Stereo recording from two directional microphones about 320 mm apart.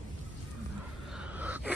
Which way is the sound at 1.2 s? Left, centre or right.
Centre.